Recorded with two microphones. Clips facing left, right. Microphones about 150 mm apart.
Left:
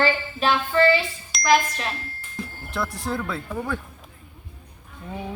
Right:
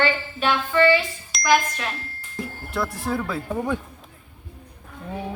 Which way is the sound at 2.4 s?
Centre (ahead or behind).